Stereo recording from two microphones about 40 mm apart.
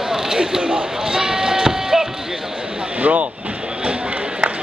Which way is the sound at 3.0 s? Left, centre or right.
Right.